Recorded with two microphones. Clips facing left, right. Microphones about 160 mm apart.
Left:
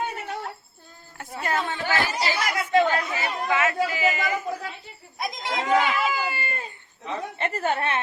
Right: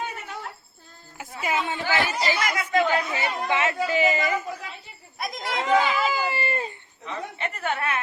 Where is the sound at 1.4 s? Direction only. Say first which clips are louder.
Even; 5° right (ahead or behind).